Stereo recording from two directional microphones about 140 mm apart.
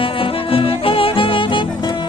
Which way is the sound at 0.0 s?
40° left (ahead or behind).